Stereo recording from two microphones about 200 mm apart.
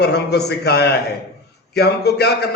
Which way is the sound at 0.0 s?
55° left (ahead or behind).